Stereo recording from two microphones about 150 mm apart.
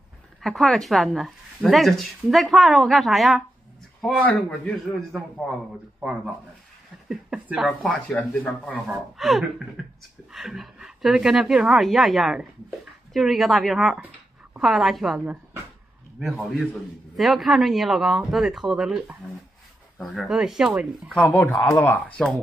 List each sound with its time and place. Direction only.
0.4 s a woman's voice: centre (ahead or behind)
7.1 s a woman's voice: 5° right (ahead or behind)
21.2 s a man's voice: 10° left (ahead or behind)